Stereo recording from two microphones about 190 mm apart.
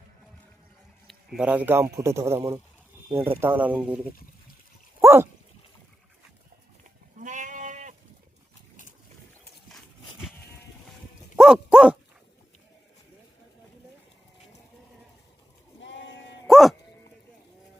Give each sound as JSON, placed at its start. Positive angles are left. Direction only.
{"t": 1.4, "sound": "speech", "side_deg": -10}
{"t": 4.9, "sound": "dog", "side_deg": -15}
{"t": 7.2, "sound": "goat", "side_deg": -40}
{"t": 9.7, "sound": "horse", "side_deg": -5}
{"t": 11.3, "sound": "dog", "side_deg": -5}
{"t": 15.8, "sound": "sheep", "side_deg": 70}
{"t": 16.5, "sound": "sheep", "side_deg": 0}